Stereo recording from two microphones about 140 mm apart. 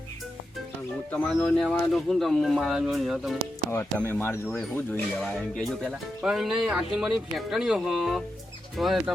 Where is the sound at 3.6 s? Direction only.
15° left (ahead or behind).